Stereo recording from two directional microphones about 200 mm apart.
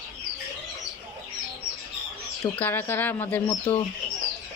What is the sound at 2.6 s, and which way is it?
Speech, 10° left (ahead or behind).